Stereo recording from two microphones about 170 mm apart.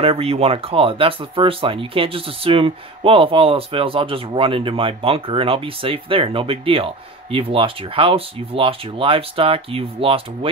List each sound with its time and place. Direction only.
0.0 s speech: 35° right (ahead or behind)